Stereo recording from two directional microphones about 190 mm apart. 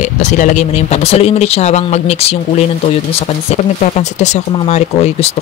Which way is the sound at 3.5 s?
35° left (ahead or behind).